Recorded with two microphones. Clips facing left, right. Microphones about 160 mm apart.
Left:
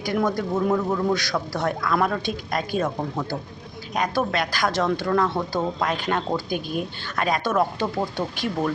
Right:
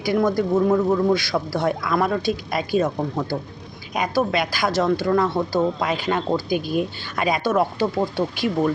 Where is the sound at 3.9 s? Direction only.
10° right (ahead or behind).